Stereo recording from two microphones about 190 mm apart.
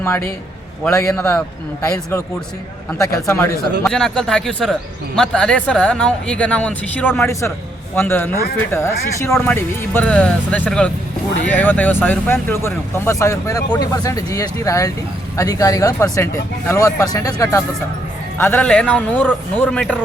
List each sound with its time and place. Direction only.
0.0 s a man's voice: 10° left (ahead or behind)
3.2 s speech: 10° left (ahead or behind)